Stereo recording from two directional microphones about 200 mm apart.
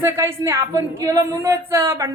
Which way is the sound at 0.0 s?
15° right (ahead or behind).